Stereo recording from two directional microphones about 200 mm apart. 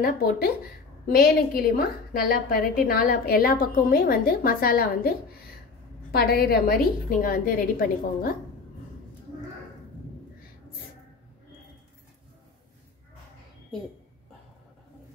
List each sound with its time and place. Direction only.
0.0 s a woman's voice: 50° left (ahead or behind)
6.1 s a woman's voice: 50° left (ahead or behind)